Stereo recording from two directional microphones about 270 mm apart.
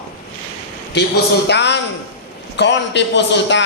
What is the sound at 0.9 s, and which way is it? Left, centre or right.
A man's voice, left.